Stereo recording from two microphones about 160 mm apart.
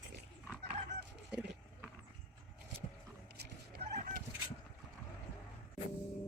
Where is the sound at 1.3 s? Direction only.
5° right (ahead or behind).